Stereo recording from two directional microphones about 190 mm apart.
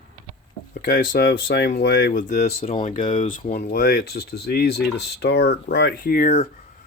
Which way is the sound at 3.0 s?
40° left (ahead or behind).